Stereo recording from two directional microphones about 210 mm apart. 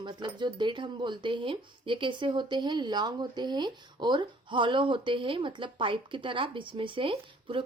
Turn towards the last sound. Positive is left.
turn(degrees=-25)  # may be behind; listen again after turning